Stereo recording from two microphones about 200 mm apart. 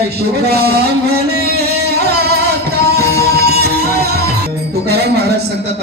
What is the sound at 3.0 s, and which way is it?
Music, 50° right (ahead or behind).